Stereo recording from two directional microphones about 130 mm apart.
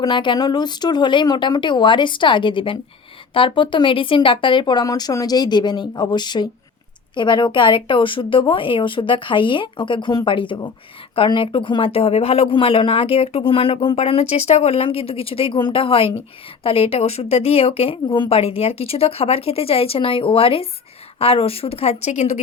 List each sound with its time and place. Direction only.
0.0 s speech: 35° left (ahead or behind); by 22.4 s 60° left (ahead or behind)